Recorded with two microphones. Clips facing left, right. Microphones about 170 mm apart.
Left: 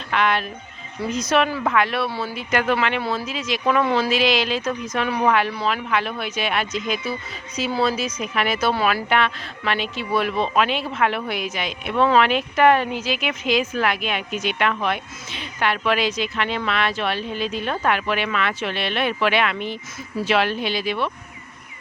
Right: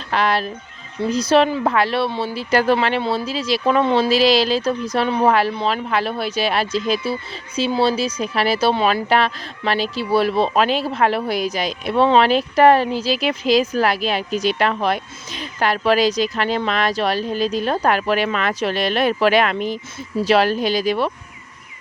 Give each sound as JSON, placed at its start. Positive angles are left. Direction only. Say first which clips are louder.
{"t": 0.1, "sound": "speech", "louder": "right 2 dB", "side_deg": -35}